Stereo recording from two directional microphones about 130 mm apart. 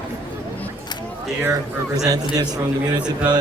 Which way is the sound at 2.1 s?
30° right (ahead or behind).